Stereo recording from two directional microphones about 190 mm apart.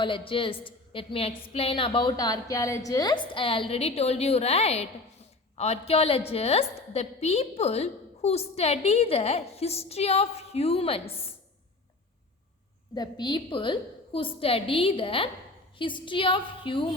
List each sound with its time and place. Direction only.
0.0 s a woman's voice: 25° left (ahead or behind)
12.9 s a woman's voice: 20° left (ahead or behind)